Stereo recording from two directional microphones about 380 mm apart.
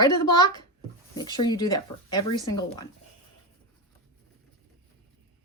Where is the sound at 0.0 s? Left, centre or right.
Centre.